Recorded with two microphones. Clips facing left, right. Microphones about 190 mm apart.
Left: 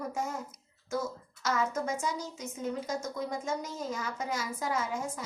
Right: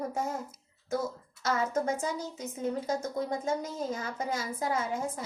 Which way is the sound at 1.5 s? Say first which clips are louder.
Right 2 dB; 30° right (ahead or behind).